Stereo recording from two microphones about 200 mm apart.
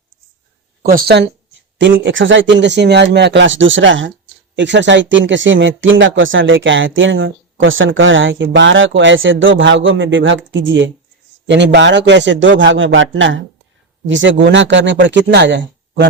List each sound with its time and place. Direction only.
0.8 s speech: 45° right (ahead or behind)
1.8 s speech: 65° right (ahead or behind)